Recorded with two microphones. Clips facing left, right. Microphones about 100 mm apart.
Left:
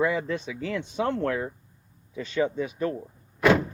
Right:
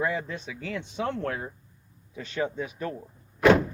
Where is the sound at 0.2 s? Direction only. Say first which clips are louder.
Left 6 dB; 90° left.